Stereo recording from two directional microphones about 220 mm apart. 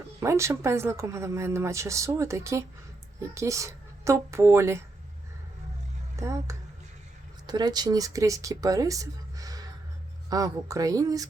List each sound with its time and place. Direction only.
0.2 s a woman's voice: 15° right (ahead or behind)
6.1 s speech: 15° right (ahead or behind)